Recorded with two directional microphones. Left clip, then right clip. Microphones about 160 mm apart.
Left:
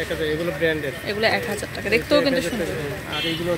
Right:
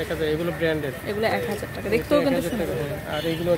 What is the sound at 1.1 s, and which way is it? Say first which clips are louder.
Speech: left 3 dB; 10° right (ahead or behind).